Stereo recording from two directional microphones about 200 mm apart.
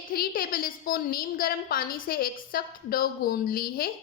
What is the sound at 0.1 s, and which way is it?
A woman's voice, 45° left (ahead or behind).